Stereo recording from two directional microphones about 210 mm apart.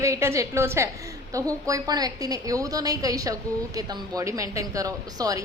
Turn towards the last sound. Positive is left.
turn(degrees=-15)  # may be behind; listen again after turning